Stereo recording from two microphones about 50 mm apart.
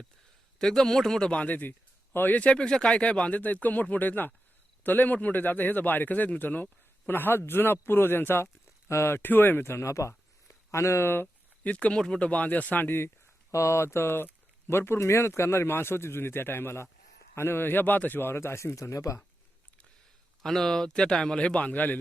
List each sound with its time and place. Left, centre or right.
0.6 s speech: centre
1.3 s speech: left
7.1 s a man's voice: left
8.9 s speech: left
11.0 s a man's voice: left
11.6 s speech: left
11.9 s speech: centre
12.2 s speech: left
13.5 s a man's voice: left
20.4 s speech: centre; by 21.9 s left